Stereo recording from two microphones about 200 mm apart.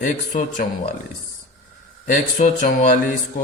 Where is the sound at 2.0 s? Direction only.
40° left (ahead or behind).